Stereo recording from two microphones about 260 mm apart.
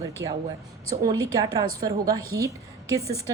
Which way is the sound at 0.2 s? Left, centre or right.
Right.